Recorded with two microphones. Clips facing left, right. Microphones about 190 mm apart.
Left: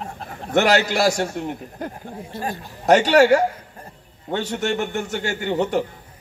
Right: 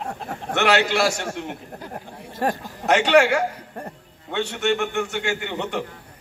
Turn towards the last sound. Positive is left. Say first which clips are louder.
# left 6 dB
turn(degrees=40)  # may be behind; listen again after turning